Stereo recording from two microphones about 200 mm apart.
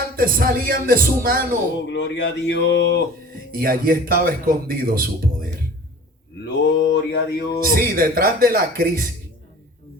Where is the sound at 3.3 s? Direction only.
45° right (ahead or behind).